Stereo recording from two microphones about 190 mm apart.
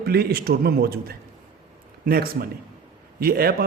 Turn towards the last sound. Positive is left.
turn(degrees=-55)  # may be behind; listen again after turning